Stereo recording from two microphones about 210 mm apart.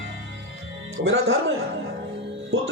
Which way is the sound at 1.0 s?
65° right (ahead or behind).